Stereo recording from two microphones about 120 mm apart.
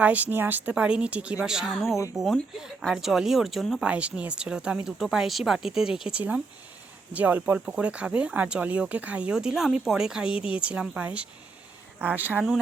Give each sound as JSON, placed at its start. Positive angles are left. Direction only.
{"t": 0.0, "sound": "speech", "side_deg": -10}